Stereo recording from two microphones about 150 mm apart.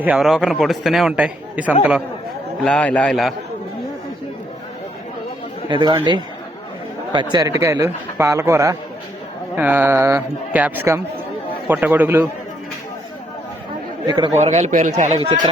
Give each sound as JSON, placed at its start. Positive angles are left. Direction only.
{"t": 0.0, "sound": "a man's voice", "side_deg": -5}
{"t": 2.6, "sound": "a man's voice", "side_deg": 10}
{"t": 5.6, "sound": "a man's voice", "side_deg": -30}
{"t": 14.3, "sound": "a man's voice", "side_deg": -50}
{"t": 15.2, "sound": "speech", "side_deg": -30}